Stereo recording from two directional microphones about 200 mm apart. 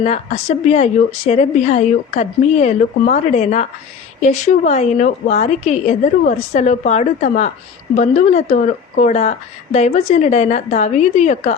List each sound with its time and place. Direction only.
0.0 s a woman's voice: 35° left (ahead or behind)